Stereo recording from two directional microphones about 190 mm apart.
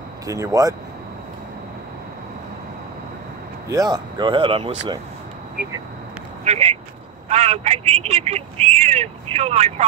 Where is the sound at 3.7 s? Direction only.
20° right (ahead or behind).